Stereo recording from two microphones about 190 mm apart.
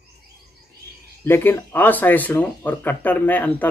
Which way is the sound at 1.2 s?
10° left (ahead or behind).